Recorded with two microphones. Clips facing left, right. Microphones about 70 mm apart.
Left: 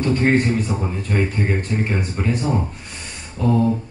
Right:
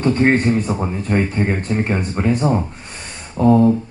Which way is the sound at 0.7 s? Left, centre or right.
Right.